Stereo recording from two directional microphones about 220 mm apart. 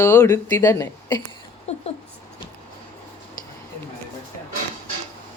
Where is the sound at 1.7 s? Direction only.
30° left (ahead or behind).